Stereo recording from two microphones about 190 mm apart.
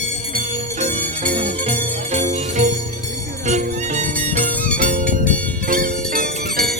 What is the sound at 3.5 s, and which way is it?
Music, 40° right (ahead or behind).